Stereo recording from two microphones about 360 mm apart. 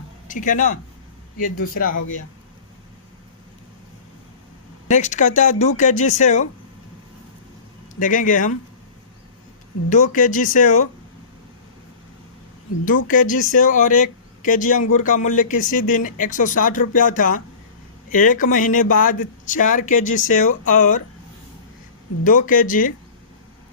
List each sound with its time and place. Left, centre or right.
0.3 s speech: left
4.9 s speech: centre
7.9 s speech: left
9.9 s speech: left
12.8 s speech: left
22.2 s speech: left